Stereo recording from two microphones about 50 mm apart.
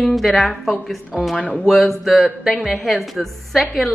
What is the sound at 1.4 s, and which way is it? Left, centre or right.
Speech, left.